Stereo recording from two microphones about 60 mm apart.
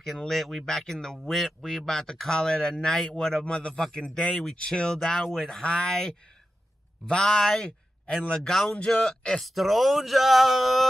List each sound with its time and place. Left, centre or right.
0.3 s speech: centre
9.5 s speech: centre